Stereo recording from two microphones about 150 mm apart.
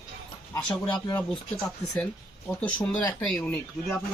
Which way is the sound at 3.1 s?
10° left (ahead or behind).